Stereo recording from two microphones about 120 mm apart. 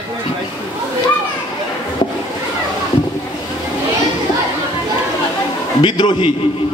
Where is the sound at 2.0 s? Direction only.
45° left (ahead or behind).